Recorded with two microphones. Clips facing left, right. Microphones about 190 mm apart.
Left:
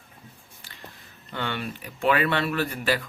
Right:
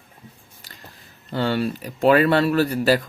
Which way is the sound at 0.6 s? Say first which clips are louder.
Right 4 dB; 40° right (ahead or behind).